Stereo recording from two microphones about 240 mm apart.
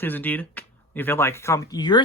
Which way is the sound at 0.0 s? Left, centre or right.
Centre.